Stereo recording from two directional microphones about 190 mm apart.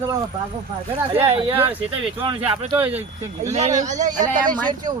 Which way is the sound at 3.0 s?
35° right (ahead or behind).